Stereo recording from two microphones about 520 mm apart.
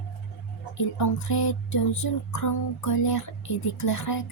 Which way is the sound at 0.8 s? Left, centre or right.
Left.